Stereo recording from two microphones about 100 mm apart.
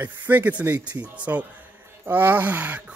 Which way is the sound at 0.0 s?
15° right (ahead or behind).